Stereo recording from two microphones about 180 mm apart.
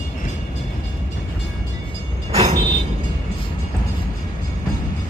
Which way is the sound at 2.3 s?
40° right (ahead or behind).